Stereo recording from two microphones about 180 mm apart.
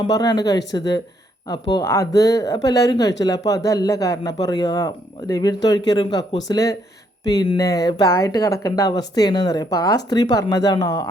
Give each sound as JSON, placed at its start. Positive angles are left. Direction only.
{"t": 0.0, "sound": "speech", "side_deg": 25}